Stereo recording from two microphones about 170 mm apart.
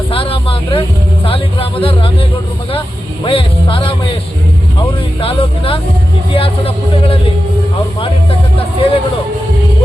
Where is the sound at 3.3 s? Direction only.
30° left (ahead or behind).